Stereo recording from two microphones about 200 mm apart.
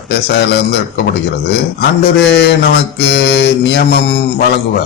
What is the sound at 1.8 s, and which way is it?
A man's voice, 55° left (ahead or behind).